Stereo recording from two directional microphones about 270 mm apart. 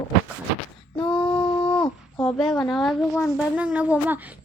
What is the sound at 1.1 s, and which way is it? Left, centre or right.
Speech, centre.